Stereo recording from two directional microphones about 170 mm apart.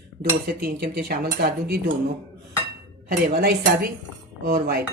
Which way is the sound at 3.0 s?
65° right (ahead or behind).